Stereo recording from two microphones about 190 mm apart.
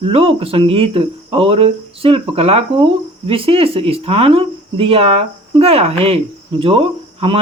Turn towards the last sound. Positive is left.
turn(degrees=-30)  # may be behind; listen again after turning